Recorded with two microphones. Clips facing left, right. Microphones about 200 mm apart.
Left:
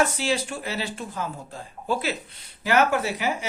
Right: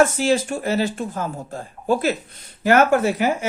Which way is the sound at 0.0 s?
45° right (ahead or behind).